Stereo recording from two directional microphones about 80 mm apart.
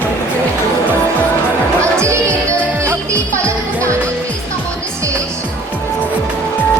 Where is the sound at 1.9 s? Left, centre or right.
Right.